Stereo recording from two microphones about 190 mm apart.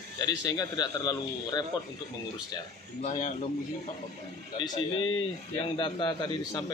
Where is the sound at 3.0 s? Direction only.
45° left (ahead or behind).